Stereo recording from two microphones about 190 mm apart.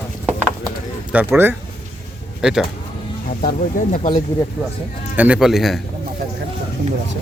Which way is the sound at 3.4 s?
45° left (ahead or behind).